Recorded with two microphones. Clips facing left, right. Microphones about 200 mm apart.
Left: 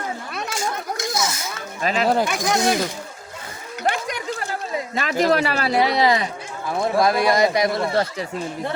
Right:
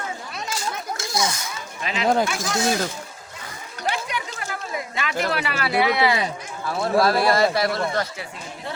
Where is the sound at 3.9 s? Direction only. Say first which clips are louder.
Left 3 dB; 40° left (ahead or behind).